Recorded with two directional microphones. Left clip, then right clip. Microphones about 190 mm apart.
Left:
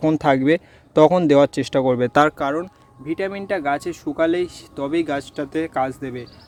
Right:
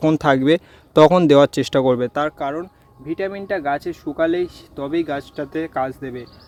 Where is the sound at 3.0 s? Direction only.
10° left (ahead or behind).